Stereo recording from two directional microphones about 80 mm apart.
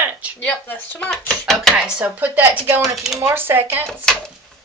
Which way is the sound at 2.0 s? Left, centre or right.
Centre.